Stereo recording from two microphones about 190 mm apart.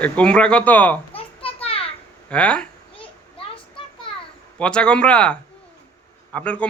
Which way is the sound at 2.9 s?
30° left (ahead or behind).